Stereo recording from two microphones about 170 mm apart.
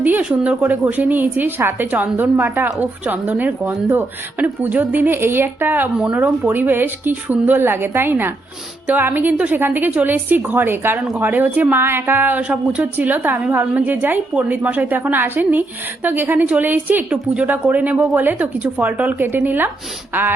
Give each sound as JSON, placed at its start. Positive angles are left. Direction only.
{"t": 0.0, "sound": "a woman's voice", "side_deg": -10}